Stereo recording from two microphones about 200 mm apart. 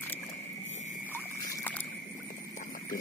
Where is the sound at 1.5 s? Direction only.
10° left (ahead or behind).